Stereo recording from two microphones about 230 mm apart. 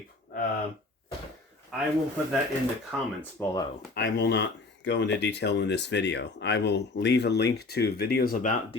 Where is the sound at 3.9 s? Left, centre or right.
Left.